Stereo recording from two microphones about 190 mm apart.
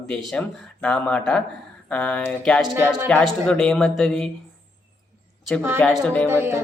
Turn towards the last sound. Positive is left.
turn(degrees=-10)  # may be behind; listen again after turning